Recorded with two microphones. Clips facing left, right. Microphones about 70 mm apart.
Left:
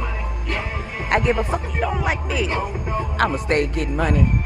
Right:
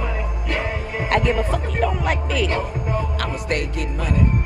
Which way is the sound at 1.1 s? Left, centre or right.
Centre.